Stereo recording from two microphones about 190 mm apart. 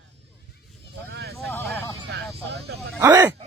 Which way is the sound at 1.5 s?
10° left (ahead or behind).